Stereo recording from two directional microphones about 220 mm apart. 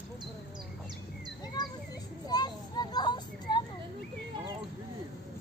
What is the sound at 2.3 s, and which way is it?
Children playing, 20° left (ahead or behind).